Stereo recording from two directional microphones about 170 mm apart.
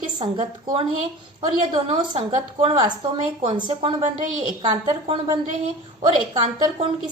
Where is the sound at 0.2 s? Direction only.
30° right (ahead or behind).